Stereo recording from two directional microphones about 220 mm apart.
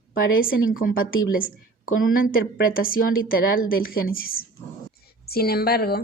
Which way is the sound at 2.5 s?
40° left (ahead or behind).